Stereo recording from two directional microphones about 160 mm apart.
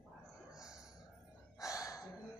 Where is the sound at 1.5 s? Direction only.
20° left (ahead or behind).